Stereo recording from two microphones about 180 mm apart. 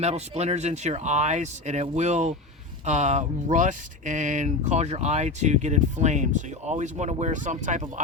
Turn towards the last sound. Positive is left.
turn(degrees=-45)  # may be behind; listen again after turning